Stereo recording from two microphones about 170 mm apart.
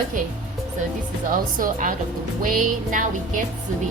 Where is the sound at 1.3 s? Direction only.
55° right (ahead or behind).